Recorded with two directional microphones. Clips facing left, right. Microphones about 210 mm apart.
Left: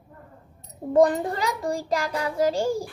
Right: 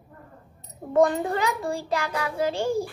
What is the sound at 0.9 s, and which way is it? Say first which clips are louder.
Child singing: left 1 dB; 35° left (ahead or behind).